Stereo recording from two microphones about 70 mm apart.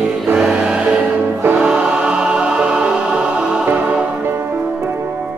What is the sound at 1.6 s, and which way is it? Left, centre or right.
Music, centre.